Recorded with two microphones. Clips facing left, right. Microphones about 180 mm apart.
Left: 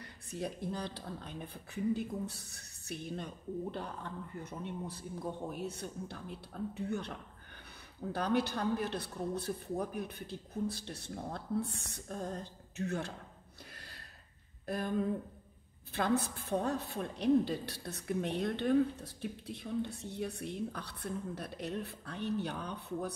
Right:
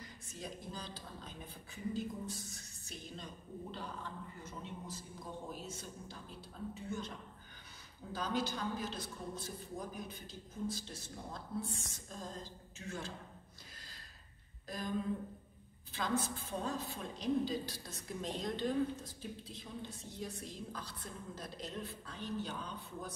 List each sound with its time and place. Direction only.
0.0 s a woman's voice: 65° left (ahead or behind)
4.4 s a woman's voice: 60° left (ahead or behind)
13.7 s a sound: 60° left (ahead or behind)
14.7 s a woman's voice: 60° left (ahead or behind)